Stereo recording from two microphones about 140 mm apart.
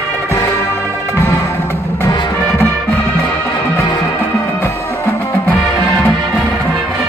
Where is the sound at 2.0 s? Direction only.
30° left (ahead or behind).